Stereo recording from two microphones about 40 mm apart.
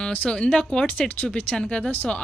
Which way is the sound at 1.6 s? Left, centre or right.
Left.